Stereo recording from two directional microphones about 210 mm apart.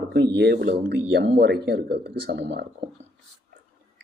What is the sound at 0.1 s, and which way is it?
Speech, 55° right (ahead or behind).